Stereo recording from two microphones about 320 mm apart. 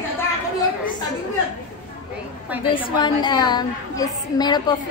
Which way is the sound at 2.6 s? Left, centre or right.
Centre.